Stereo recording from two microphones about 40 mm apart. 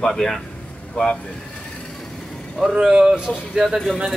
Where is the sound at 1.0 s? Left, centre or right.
Left.